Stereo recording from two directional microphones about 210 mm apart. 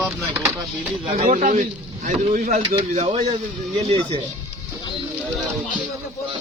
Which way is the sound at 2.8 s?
25° right (ahead or behind).